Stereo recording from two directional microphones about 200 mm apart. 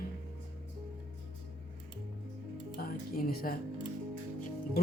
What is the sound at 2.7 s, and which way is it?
Speech, 45° left (ahead or behind).